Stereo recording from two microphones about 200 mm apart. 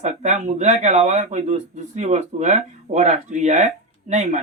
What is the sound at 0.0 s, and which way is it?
Speech, 35° right (ahead or behind).